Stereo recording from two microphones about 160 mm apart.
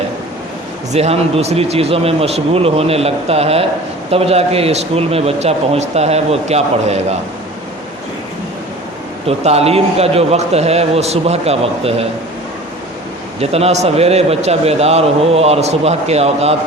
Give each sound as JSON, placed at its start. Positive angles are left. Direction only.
{"t": 0.9, "sound": "a man's voice", "side_deg": -40}
{"t": 9.2, "sound": "a man's voice", "side_deg": -40}
{"t": 13.4, "sound": "a man's voice", "side_deg": -40}